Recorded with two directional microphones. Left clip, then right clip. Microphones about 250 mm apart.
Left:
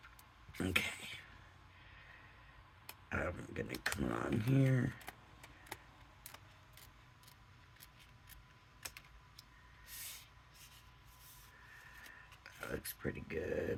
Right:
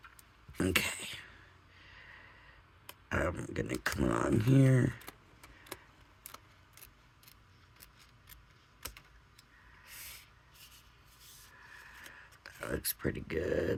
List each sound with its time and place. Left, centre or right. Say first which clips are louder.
0.5 s speech: right 5 dB; right
3.1 s speech: right 6 dB; right
12.4 s speech: right 6 dB; right